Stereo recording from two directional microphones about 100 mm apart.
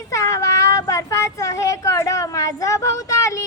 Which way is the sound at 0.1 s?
35° left (ahead or behind).